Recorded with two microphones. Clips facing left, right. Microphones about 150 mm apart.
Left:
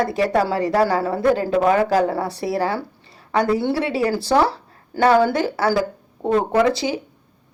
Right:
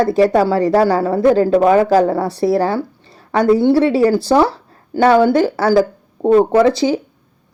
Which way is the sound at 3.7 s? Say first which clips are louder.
Right 8 dB; 35° right (ahead or behind).